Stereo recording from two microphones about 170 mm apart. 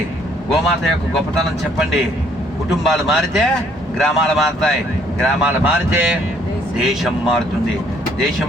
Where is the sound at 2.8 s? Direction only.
Centre (ahead or behind).